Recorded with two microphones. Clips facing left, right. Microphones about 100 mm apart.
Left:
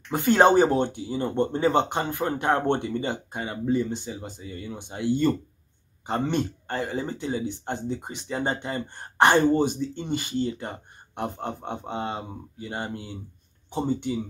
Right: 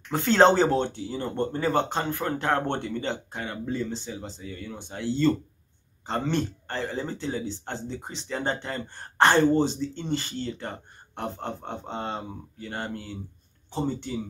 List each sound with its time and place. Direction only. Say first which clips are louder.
0.1 s speech: left 1 dB; 15° left (ahead or behind)